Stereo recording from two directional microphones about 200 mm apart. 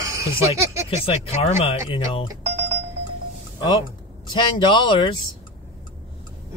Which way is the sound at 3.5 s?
25° left (ahead or behind).